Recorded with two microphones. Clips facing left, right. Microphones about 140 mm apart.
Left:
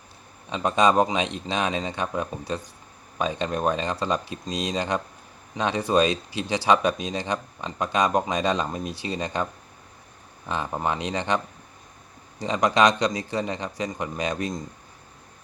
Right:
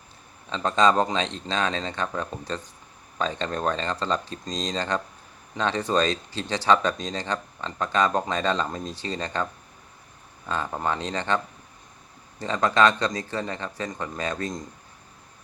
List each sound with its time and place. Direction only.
0.5 s speech: 15° left (ahead or behind)
12.4 s speech: 15° left (ahead or behind)